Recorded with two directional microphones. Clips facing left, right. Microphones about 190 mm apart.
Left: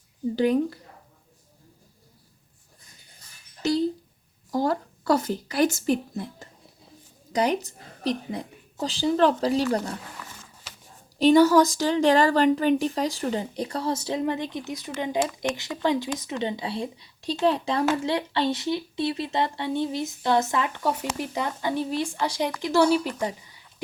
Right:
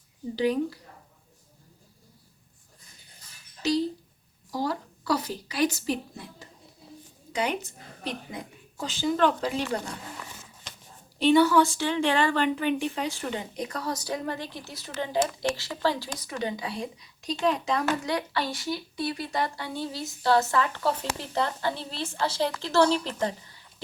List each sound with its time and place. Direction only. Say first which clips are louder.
0.3 s a woman's voice: left 3 dB; 50° left (ahead or behind)
3.6 s a woman's voice: left 2 dB; 50° left (ahead or behind)
7.3 s speech: left 5 dB; 40° left (ahead or behind)
10.7 s a sound: right 1 dB; 5° left (ahead or behind)
11.2 s speech: left 3 dB; 40° left (ahead or behind); by 23.6 s 10° left (ahead or behind)